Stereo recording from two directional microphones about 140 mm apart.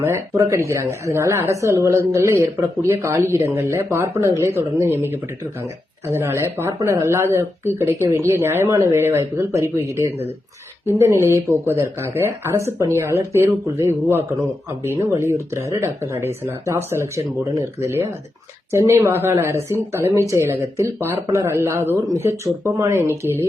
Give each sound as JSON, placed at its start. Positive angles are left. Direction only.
{"t": 0.0, "sound": "speech", "side_deg": -20}
{"t": 18.7, "sound": "speech", "side_deg": -20}